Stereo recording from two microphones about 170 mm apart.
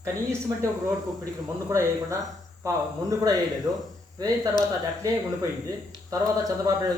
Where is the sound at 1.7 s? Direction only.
15° right (ahead or behind).